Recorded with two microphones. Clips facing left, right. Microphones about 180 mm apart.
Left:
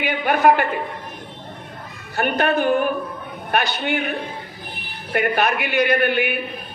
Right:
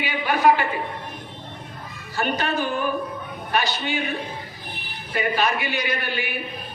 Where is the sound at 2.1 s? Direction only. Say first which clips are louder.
Left 5 dB; 60° left (ahead or behind).